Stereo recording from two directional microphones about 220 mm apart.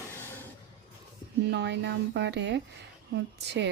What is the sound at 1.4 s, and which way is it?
A woman's voice, 50° right (ahead or behind).